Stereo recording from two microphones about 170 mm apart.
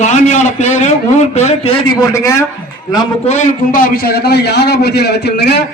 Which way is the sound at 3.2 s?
45° left (ahead or behind).